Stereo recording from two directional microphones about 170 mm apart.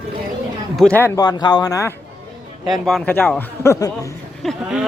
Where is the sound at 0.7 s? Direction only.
5° left (ahead or behind).